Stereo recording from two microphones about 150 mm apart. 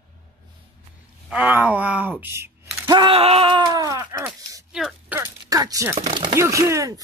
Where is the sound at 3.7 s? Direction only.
25° right (ahead or behind).